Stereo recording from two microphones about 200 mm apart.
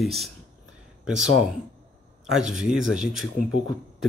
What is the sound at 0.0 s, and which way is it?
Speech, centre (ahead or behind).